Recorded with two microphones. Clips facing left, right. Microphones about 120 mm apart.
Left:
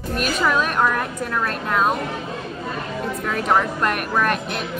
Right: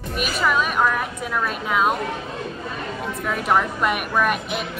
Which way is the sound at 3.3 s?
Centre (ahead or behind).